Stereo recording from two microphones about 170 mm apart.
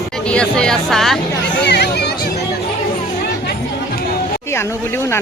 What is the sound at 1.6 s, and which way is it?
Chatter, 75° left (ahead or behind).